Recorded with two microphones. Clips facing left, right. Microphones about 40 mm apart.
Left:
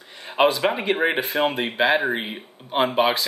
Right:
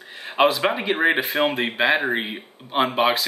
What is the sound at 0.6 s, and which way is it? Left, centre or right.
Speech, centre.